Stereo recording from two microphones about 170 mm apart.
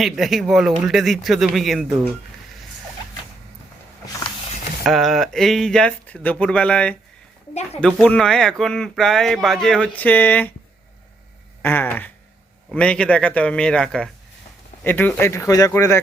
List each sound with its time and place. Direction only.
0.0 s speech: centre (ahead or behind)
4.8 s speech: centre (ahead or behind)
11.6 s speech: 10° left (ahead or behind)